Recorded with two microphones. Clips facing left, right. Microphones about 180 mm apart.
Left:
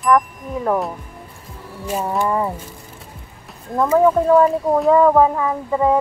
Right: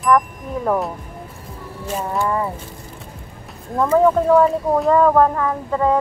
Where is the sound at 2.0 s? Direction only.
15° left (ahead or behind).